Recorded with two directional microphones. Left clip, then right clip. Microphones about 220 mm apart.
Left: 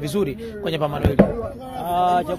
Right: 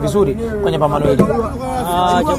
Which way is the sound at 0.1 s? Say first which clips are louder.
Right 7 dB; 40° left (ahead or behind).